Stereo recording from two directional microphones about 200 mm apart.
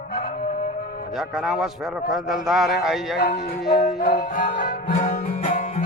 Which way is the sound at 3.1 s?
55° left (ahead or behind).